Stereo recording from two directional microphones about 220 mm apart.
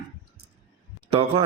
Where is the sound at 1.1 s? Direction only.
25° right (ahead or behind).